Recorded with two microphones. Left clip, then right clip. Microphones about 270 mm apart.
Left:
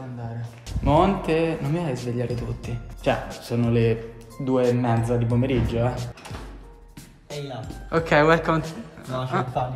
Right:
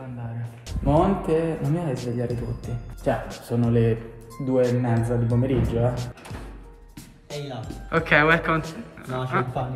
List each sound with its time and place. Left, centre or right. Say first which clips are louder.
0.7 s speech: left 2 dB; centre
7.2 s music: even; centre
7.9 s speech: even; centre
8.6 s speech: even; centre